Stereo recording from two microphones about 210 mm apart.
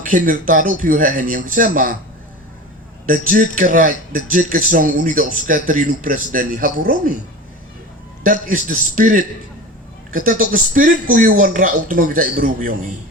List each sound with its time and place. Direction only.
0.0 s a man's voice: 40° right (ahead or behind)
3.1 s a man's voice: 40° right (ahead or behind)
8.2 s a man's voice: 40° right (ahead or behind)